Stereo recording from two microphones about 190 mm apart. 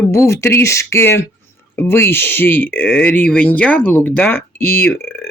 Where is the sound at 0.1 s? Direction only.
15° left (ahead or behind).